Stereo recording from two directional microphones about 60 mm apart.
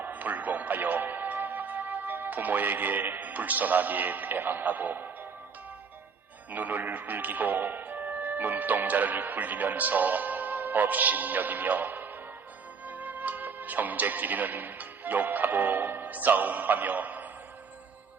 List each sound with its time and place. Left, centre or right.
0.0 s music: right
6.5 s speech: right